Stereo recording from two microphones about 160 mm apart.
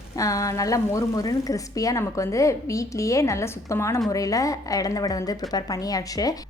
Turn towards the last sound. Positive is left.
turn(degrees=25)  # may be behind; listen again after turning